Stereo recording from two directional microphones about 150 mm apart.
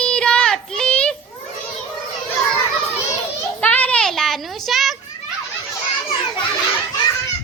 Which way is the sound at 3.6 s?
10° left (ahead or behind).